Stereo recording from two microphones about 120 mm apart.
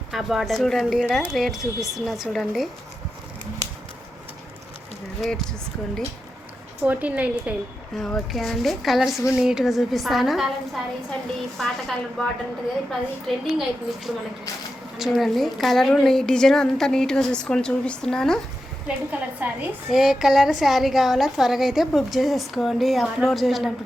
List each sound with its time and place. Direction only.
0.1 s a woman's voice: 5° right (ahead or behind)
6.8 s a woman's voice: 15° right (ahead or behind)
7.9 s a woman's voice: centre (ahead or behind)
11.5 s a woman's voice: centre (ahead or behind)
19.1 s a woman's voice: 15° right (ahead or behind)
19.9 s a woman's voice: 5° right (ahead or behind)